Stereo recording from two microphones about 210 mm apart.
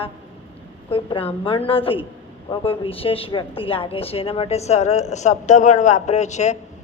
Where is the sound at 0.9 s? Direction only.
25° left (ahead or behind).